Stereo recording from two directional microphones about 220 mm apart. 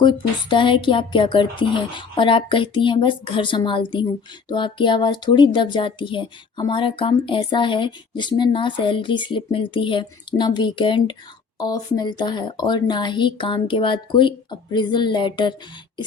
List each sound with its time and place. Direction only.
0.0 s speech: 20° left (ahead or behind)